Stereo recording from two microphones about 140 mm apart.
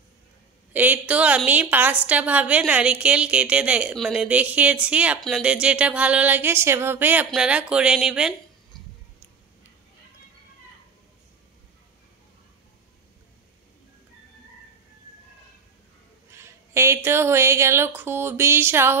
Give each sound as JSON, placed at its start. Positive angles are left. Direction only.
{"t": 0.7, "sound": "a woman's voice", "side_deg": -10}
{"t": 16.3, "sound": "a woman's voice", "side_deg": -20}